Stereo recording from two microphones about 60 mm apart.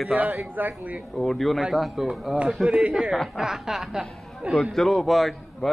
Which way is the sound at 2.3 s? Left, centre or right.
Centre.